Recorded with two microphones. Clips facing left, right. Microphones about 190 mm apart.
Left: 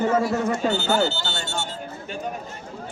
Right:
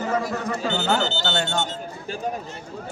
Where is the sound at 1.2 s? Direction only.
65° right (ahead or behind).